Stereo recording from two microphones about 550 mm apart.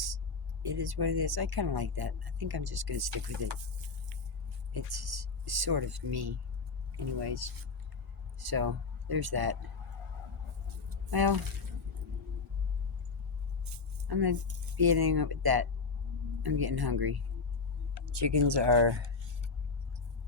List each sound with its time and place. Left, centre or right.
0.6 s speech: right
10.8 s vehicle: right
14.1 s speech: right